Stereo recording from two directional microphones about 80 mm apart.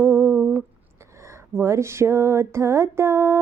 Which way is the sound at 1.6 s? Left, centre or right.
Right.